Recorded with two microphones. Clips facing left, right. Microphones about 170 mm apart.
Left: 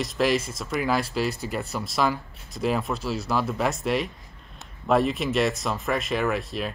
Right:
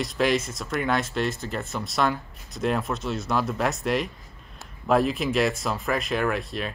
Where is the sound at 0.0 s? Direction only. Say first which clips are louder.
Even; centre (ahead or behind).